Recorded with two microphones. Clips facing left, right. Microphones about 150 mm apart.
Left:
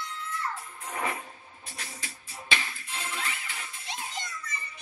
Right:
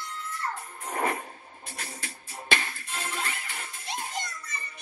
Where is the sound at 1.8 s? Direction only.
50° right (ahead or behind).